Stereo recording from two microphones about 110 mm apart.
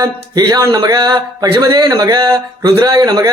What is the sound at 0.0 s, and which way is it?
Speech, 40° right (ahead or behind).